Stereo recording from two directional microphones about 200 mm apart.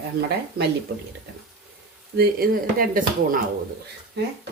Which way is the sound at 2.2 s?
45° right (ahead or behind).